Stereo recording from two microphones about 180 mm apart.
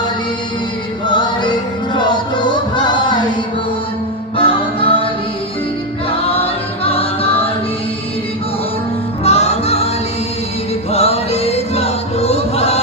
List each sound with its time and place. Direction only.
1.0 s choir: 25° left (ahead or behind)
1.9 s music: 25° left (ahead or behind)
4.4 s music: 30° left (ahead or behind)
6.1 s music: 35° left (ahead or behind)
9.2 s music: 35° left (ahead or behind)
10.9 s music: 35° left (ahead or behind)